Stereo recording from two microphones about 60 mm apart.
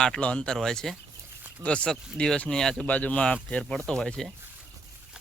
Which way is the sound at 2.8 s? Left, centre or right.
Left.